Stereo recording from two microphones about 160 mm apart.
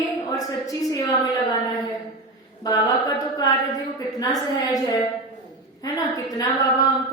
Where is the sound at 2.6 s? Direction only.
25° left (ahead or behind).